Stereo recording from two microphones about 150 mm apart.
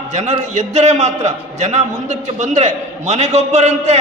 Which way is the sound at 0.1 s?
50° right (ahead or behind).